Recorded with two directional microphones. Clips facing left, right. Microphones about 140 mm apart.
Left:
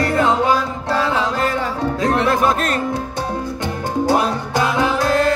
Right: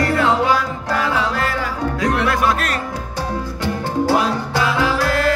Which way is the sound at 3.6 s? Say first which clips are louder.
Right 1 dB; 20° left (ahead or behind).